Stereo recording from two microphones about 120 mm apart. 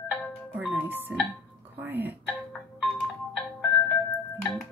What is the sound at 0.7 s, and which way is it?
Music, 15° right (ahead or behind).